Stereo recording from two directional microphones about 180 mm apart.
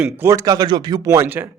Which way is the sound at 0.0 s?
15° right (ahead or behind).